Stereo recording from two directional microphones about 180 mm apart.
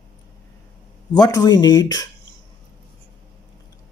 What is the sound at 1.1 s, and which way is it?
Speech, 20° left (ahead or behind).